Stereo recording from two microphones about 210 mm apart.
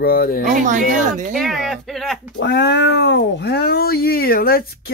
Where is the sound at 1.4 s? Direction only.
Centre (ahead or behind).